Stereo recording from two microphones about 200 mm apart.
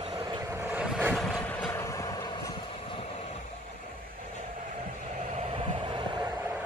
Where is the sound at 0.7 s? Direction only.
5° right (ahead or behind).